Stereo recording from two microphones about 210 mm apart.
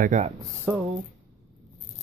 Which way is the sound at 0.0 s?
35° right (ahead or behind).